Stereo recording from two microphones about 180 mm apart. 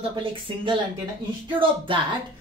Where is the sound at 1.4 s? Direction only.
30° right (ahead or behind).